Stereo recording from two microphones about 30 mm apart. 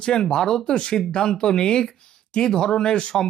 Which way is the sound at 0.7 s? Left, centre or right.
Left.